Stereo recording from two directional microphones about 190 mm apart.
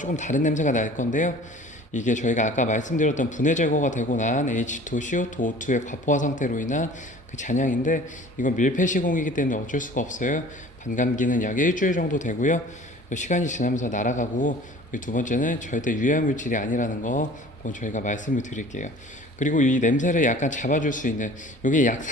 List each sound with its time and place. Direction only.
0.0 s a man's voice: 40° left (ahead or behind)